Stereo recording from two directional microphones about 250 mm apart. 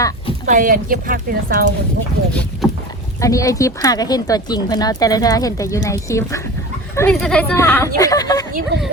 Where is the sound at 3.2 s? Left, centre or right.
Centre.